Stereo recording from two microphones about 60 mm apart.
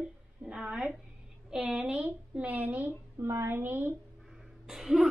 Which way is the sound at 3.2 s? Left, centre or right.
Right.